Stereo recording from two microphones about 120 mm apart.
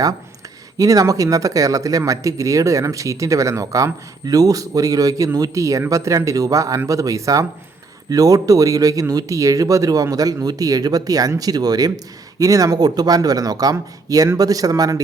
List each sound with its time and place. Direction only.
0.8 s speech: 30° right (ahead or behind)